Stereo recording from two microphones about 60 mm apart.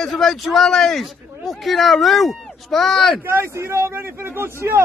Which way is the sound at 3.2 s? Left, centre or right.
Right.